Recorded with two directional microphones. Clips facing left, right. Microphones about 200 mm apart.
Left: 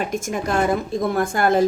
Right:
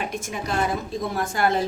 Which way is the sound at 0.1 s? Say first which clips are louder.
Left 6 dB; 50° left (ahead or behind).